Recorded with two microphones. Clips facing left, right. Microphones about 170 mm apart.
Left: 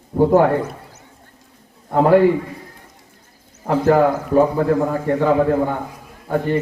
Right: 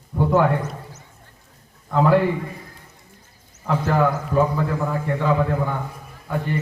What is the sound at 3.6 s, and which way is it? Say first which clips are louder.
A man's voice: left 6 dB; 40° left (ahead or behind).